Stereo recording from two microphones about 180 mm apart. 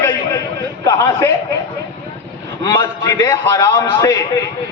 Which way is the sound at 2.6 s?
20° left (ahead or behind).